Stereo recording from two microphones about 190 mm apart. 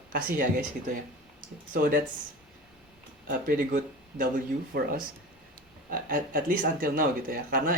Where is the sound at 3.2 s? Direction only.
50° right (ahead or behind).